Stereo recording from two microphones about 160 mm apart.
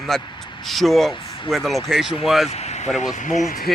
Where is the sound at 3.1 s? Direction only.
50° left (ahead or behind).